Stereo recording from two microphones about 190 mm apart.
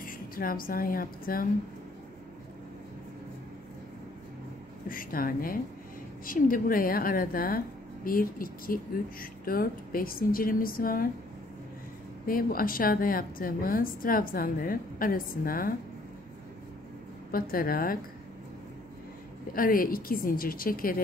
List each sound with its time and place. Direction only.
0.0 s a woman's voice: 50° left (ahead or behind)
4.8 s a sound: 50° left (ahead or behind)
6.2 s a woman's voice: 45° left (ahead or behind)
12.3 s a woman's voice: 50° left (ahead or behind)
17.3 s a woman's voice: 50° left (ahead or behind)
19.5 s a woman's voice: 50° left (ahead or behind)